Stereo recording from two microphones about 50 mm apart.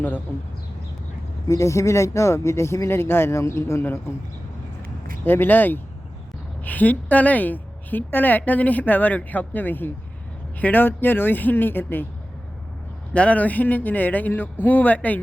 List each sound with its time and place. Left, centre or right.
1.5 s speech: left
5.2 s a woman's voice: left
13.1 s a woman's voice: left